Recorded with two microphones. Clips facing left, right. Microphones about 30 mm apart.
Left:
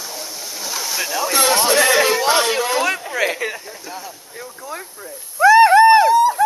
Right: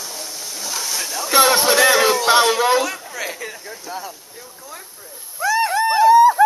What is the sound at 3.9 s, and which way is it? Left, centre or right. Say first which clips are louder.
Speech: right 3 dB; centre.